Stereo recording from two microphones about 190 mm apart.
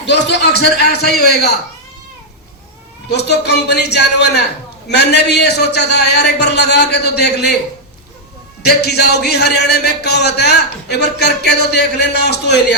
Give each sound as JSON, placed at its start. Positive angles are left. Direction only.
{"t": 0.0, "sound": "speech", "side_deg": 65}
{"t": 3.1, "sound": "speech", "side_deg": 60}
{"t": 8.6, "sound": "speech", "side_deg": 60}